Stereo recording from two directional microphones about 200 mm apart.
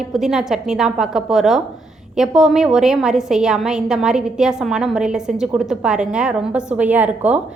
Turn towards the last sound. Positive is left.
turn(degrees=-10)  # may be behind; listen again after turning